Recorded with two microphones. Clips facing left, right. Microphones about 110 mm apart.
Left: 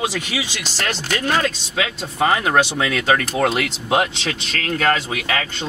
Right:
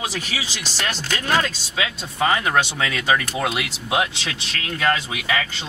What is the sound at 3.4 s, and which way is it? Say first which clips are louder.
Speech: left 5 dB; 50° left (ahead or behind).